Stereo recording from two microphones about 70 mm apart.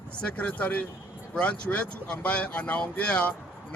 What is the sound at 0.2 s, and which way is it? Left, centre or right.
Speech, centre.